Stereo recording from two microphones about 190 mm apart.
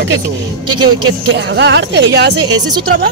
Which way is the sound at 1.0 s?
65° right (ahead or behind).